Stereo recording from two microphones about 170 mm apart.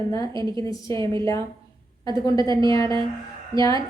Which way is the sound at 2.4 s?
25° right (ahead or behind).